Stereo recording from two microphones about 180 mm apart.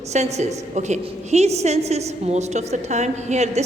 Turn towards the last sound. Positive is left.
turn(degrees=-40)  # may be behind; listen again after turning